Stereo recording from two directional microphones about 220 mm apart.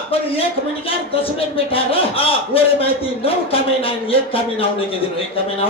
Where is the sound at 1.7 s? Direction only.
25° left (ahead or behind).